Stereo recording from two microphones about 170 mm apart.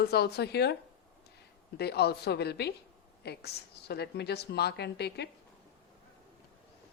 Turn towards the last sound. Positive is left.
turn(degrees=75)  # may be behind; listen again after turning